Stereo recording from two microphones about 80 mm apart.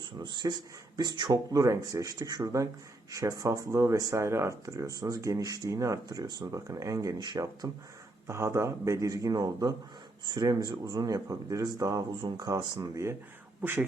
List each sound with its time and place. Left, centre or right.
0.0 s speech: right
6.1 s speech: right
6.5 s speech: right
8.3 s speech: right
10.2 s speech: right
13.6 s speech: right